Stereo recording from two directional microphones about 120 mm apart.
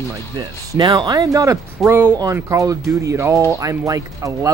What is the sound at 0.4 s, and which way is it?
Speech, 35° right (ahead or behind).